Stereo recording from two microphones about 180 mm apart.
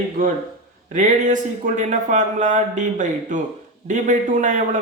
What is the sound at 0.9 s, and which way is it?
A man's voice, 45° right (ahead or behind).